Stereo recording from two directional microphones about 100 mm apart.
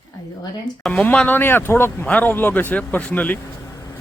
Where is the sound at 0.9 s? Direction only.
10° left (ahead or behind).